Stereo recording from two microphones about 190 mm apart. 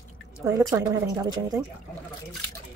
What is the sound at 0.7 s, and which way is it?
Speech, 20° right (ahead or behind).